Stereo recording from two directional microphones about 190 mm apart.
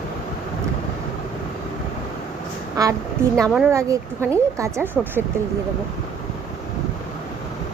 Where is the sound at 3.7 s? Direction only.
15° right (ahead or behind).